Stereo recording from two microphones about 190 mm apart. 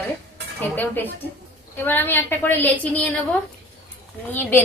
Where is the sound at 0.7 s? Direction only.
10° left (ahead or behind).